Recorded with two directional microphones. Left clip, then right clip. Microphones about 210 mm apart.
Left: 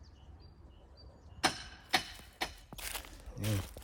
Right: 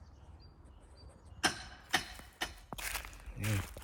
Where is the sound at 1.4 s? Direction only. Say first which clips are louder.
Left 1 dB; 40° left (ahead or behind).